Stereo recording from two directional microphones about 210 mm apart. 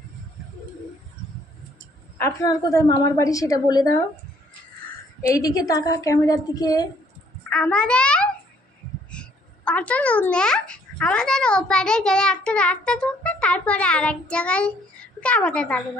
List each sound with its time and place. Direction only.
2.1 s a woman's voice: 15° left (ahead or behind)
7.4 s a child's voice: 5° left (ahead or behind)